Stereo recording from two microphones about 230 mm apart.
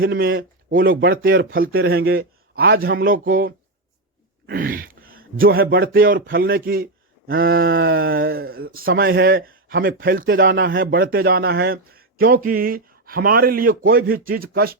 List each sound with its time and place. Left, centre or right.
0.0 s speech: right